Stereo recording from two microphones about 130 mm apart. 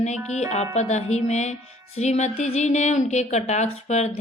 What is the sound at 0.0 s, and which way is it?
A woman's voice, 60° left (ahead or behind).